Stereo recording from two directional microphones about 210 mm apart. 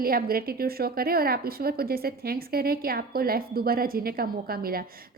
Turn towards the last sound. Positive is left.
turn(degrees=-45)  # may be behind; listen again after turning